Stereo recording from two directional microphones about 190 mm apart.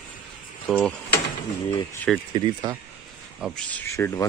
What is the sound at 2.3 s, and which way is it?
Speech, 25° right (ahead or behind).